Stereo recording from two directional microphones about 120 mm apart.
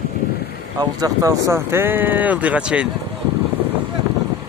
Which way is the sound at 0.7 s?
30° right (ahead or behind).